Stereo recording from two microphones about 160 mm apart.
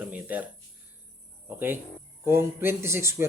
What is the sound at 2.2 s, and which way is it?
A man's voice, 15° right (ahead or behind).